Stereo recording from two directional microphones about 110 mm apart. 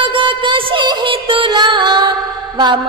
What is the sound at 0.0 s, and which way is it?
Music, 50° right (ahead or behind).